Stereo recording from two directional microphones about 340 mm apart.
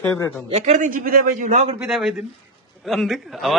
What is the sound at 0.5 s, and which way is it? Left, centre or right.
A man's voice, right.